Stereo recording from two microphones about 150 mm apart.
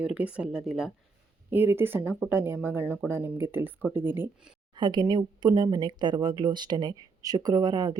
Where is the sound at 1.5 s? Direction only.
15° right (ahead or behind).